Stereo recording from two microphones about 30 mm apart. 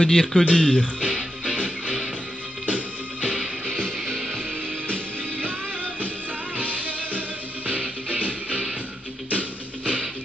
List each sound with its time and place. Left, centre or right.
0.0 s speech: left
1.0 s music: right
5.9 s music: right